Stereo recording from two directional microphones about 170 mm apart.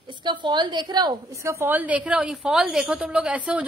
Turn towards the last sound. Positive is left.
turn(degrees=-5)  # may be behind; listen again after turning